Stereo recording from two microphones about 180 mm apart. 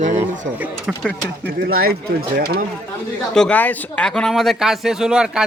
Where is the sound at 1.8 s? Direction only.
55° right (ahead or behind).